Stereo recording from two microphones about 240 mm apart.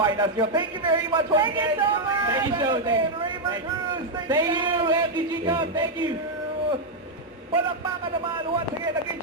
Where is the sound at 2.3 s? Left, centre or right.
Centre.